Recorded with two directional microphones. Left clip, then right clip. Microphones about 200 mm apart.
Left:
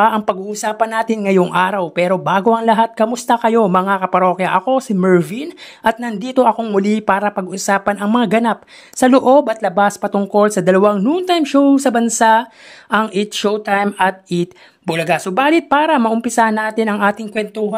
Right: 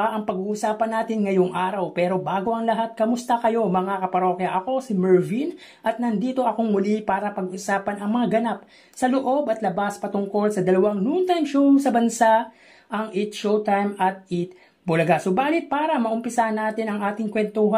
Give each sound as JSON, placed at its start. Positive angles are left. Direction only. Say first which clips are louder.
{"t": 0.0, "sound": "speech", "louder": "left 10 dB", "side_deg": 35}